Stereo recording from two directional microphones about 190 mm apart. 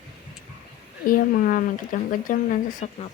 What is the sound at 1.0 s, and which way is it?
Speech, 50° left (ahead or behind).